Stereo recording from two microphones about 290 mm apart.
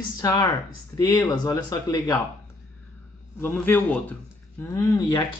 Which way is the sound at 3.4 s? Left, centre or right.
Centre.